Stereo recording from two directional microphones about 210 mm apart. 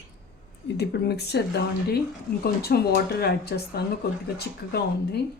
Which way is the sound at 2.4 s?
50° left (ahead or behind).